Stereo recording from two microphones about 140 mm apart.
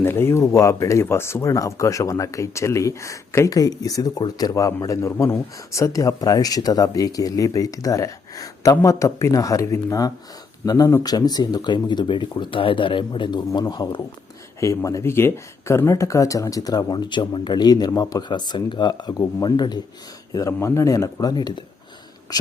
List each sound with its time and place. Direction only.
0.0 s speech: 15° left (ahead or behind)